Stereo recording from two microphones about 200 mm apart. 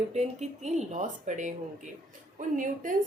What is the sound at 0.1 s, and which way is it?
A woman's voice, 35° right (ahead or behind).